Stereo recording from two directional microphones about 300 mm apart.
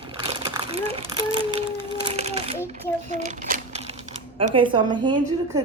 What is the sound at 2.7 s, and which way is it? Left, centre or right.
A child's voice, right.